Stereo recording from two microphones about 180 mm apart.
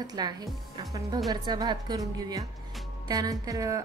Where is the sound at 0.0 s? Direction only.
20° right (ahead or behind).